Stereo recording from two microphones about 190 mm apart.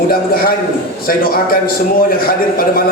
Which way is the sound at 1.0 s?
50° left (ahead or behind).